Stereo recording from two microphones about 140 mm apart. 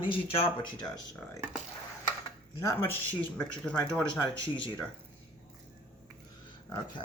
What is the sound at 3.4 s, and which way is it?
Speech, 10° left (ahead or behind).